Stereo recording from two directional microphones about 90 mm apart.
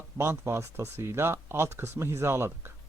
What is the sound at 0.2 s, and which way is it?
Speech, 30° right (ahead or behind).